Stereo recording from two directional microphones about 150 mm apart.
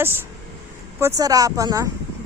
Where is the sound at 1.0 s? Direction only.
25° right (ahead or behind).